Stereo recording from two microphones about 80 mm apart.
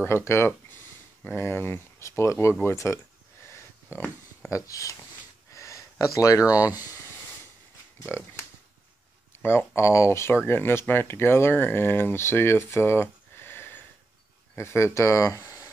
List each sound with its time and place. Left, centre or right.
0.0 s speech: left
3.4 s a sound: left
4.5 s speech: left
8.1 s speech: left
9.4 s speech: left